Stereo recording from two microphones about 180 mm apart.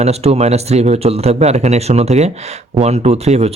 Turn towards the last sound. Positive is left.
turn(degrees=-35)  # may be behind; listen again after turning